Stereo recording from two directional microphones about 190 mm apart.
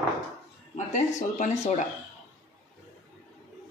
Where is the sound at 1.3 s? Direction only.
40° left (ahead or behind).